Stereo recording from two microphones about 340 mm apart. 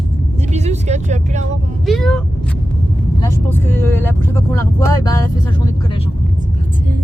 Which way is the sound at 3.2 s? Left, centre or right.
Centre.